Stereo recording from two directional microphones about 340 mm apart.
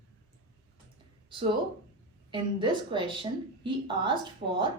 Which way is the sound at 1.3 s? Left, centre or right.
Centre.